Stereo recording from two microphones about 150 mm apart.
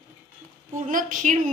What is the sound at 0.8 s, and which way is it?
Speech, 60° right (ahead or behind).